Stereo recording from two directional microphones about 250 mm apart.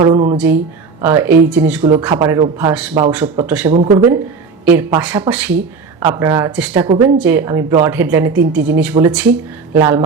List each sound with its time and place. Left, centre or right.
0.0 s speech: centre
0.3 s speech: centre
3.7 s speech: right
6.7 s speech: centre
7.2 s speech: centre